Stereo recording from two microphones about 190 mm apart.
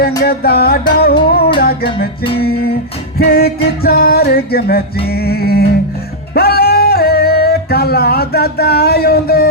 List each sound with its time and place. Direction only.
0.2 s music: 55° left (ahead or behind)
3.2 s music: 55° left (ahead or behind)